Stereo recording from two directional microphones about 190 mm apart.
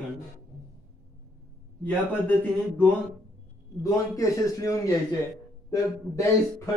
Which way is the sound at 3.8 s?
20° left (ahead or behind).